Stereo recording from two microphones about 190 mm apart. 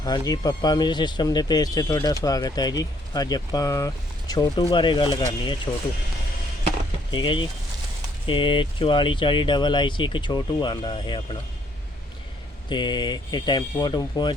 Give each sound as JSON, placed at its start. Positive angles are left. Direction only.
{"t": 0.0, "sound": "speech", "side_deg": 20}
{"t": 7.1, "sound": "speech", "side_deg": 25}
{"t": 12.6, "sound": "speech", "side_deg": 25}